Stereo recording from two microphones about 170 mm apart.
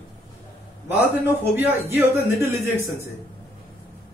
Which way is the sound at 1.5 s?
10° right (ahead or behind).